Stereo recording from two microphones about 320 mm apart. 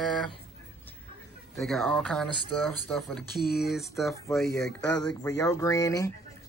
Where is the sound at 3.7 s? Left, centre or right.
Centre.